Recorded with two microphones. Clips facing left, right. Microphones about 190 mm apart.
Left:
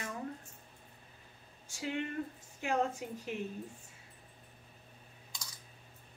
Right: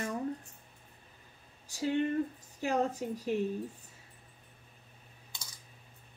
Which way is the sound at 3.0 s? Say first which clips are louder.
Right 6 dB; 35° right (ahead or behind).